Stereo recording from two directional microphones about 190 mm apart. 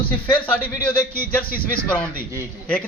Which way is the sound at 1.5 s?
50° left (ahead or behind).